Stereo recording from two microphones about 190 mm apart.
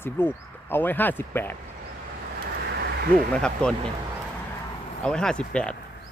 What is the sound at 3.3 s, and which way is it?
Speech, 5° left (ahead or behind).